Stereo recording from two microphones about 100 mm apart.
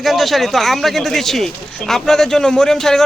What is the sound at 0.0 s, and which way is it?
A man's voice, centre (ahead or behind).